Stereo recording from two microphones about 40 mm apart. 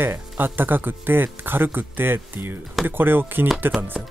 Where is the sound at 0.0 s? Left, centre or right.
Right.